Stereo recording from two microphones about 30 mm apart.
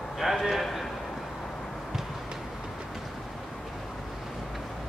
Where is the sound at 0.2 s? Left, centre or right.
Centre.